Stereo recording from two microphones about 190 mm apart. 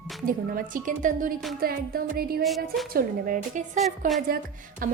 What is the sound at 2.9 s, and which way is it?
A woman's voice, 45° right (ahead or behind).